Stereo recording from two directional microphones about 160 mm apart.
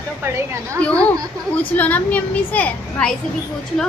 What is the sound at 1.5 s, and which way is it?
A child's voice, 10° left (ahead or behind).